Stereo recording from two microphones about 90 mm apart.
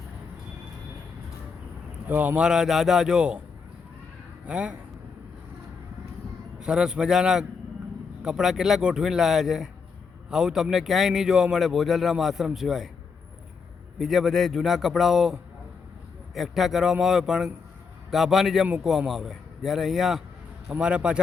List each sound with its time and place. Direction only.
2.0 s speech: 20° right (ahead or behind)
2.4 s speech: 5° right (ahead or behind)
4.4 s speech: 10° right (ahead or behind)
6.6 s a man's voice: 10° right (ahead or behind)
14.0 s a man's voice: 5° right (ahead or behind)